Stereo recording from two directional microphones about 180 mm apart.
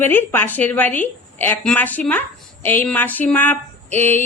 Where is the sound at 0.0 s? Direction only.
10° left (ahead or behind).